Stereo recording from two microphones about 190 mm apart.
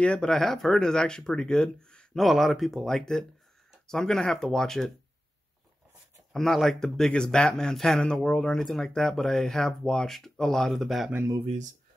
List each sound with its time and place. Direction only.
0.0 s speech: 5° left (ahead or behind)
6.3 s speech: centre (ahead or behind)
11.3 s speech: 30° right (ahead or behind)